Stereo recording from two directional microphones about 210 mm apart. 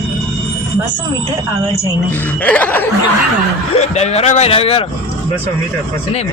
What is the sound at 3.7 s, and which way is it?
A man's voice, 30° left (ahead or behind).